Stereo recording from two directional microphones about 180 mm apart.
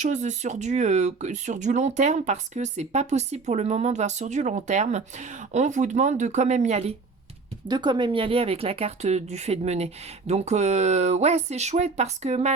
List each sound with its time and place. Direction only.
0.0 s speech: 40° right (ahead or behind)
7.7 s speech: 25° right (ahead or behind)